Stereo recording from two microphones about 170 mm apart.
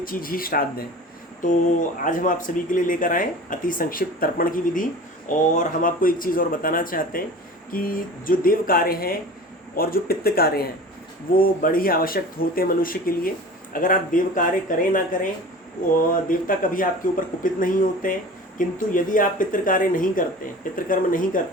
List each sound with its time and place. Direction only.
0.0 s speech: 55° left (ahead or behind)